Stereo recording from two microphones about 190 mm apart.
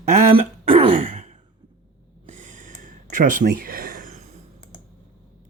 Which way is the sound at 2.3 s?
40° right (ahead or behind).